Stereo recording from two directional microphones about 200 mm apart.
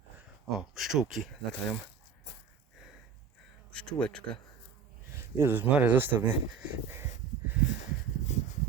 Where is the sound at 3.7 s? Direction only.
5° left (ahead or behind).